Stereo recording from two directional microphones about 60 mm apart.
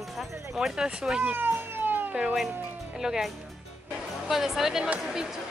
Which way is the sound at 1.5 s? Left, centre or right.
Right.